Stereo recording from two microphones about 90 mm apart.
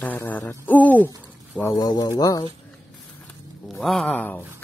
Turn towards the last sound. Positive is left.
turn(degrees=20)  # may be behind; listen again after turning